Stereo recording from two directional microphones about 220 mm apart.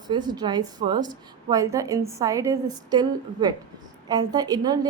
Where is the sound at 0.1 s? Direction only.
20° right (ahead or behind).